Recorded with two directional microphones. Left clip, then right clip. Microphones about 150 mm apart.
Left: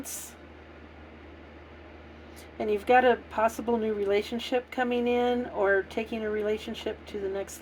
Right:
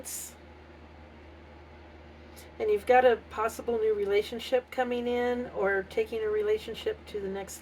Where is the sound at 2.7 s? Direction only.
40° left (ahead or behind).